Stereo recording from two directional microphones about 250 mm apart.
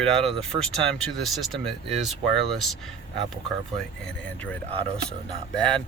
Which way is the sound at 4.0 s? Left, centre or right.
Centre.